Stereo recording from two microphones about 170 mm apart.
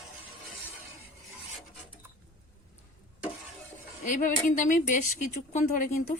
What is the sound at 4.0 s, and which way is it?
A woman's voice, 50° left (ahead or behind).